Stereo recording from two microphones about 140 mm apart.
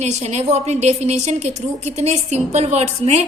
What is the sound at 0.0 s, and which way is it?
A woman's voice, 55° right (ahead or behind).